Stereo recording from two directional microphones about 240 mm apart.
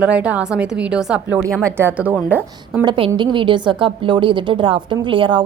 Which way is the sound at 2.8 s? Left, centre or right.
Centre.